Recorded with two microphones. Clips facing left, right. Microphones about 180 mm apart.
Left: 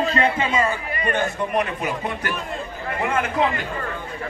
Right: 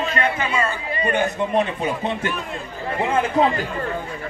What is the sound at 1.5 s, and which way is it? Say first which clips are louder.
A man's voice: right 2 dB; 25° right (ahead or behind).